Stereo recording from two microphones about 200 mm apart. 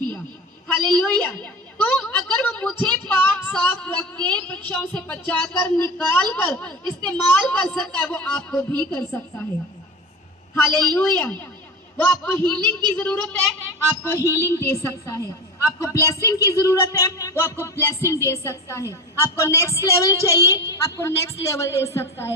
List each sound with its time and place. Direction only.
0.7 s a woman's voice: 10° left (ahead or behind)
10.8 s a woman's voice: 10° left (ahead or behind)